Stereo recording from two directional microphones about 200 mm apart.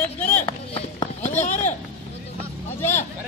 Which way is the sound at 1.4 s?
40° left (ahead or behind).